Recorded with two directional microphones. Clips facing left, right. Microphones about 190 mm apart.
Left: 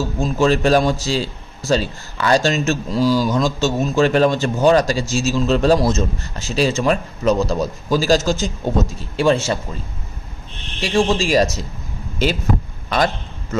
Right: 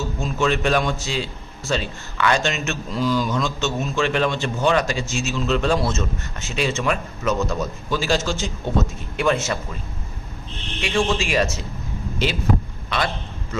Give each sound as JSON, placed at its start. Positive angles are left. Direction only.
{"t": 0.2, "sound": "a man's voice", "side_deg": 35}
{"t": 10.8, "sound": "a man's voice", "side_deg": 35}